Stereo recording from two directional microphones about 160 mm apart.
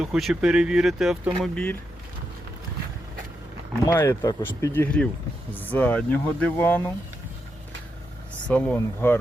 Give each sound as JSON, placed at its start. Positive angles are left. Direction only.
{"t": 0.0, "sound": "speech", "side_deg": 0}
{"t": 3.9, "sound": "speech", "side_deg": 20}
{"t": 4.7, "sound": "speech", "side_deg": 10}
{"t": 8.4, "sound": "speech", "side_deg": 10}